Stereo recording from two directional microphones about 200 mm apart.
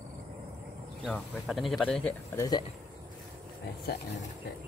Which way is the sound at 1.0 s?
Centre (ahead or behind).